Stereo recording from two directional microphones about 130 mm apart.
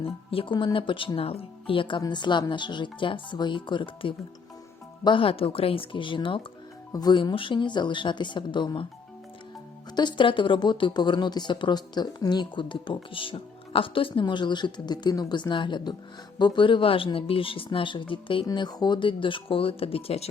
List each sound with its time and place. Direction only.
0.0 s speech: 45° left (ahead or behind)
9.9 s speech: 35° left (ahead or behind); by 20.3 s 50° left (ahead or behind)